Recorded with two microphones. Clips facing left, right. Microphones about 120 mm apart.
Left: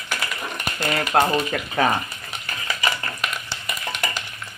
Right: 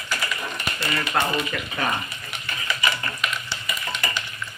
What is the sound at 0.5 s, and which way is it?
Speech, 50° left (ahead or behind).